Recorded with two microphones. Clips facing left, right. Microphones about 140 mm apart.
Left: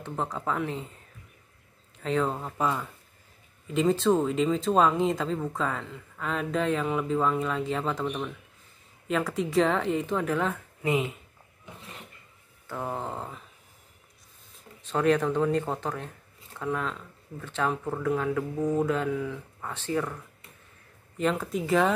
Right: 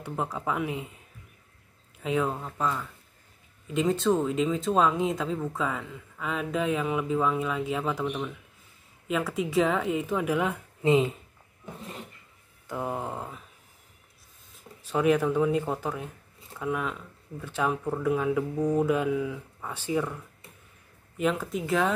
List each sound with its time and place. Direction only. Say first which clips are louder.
0.0 s speech: even; 5° right (ahead or behind)
2.0 s speech: even; 5° right (ahead or behind)
2.3 s speech: left 1 dB; 10° left (ahead or behind)
3.6 s speech: left 1 dB; centre (ahead or behind)
10.8 s speech: right 5 dB; 25° right (ahead or behind)
12.6 s speech: right 1 dB; 10° right (ahead or behind)
14.5 s speech: right 1 dB; 5° right (ahead or behind)
21.2 s speech: even; centre (ahead or behind)